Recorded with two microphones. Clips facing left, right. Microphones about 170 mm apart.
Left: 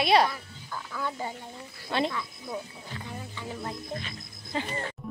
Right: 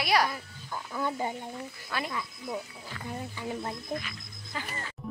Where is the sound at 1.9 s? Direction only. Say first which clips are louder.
Left 8 dB; 25° left (ahead or behind).